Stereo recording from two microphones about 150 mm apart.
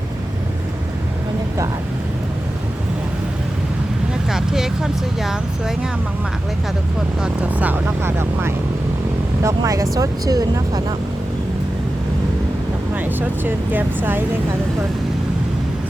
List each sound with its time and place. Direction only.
4.3 s vehicle: 5° right (ahead or behind)
7.2 s speech: 10° right (ahead or behind)
13.1 s speech: 15° right (ahead or behind)